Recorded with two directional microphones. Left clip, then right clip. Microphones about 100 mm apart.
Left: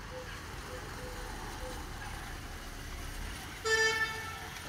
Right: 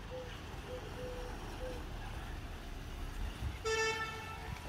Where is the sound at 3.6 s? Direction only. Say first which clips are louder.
Left 6 dB; centre (ahead or behind).